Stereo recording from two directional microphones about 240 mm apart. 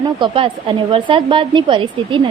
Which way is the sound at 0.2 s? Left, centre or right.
Right.